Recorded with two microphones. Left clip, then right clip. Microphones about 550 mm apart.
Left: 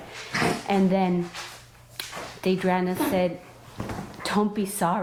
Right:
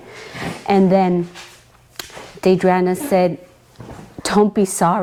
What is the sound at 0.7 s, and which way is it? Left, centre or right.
A woman's voice, right.